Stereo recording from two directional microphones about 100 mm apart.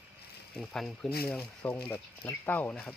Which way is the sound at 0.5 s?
5° left (ahead or behind).